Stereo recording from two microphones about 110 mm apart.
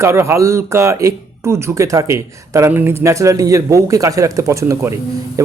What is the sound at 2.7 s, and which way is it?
A man's voice, 20° right (ahead or behind).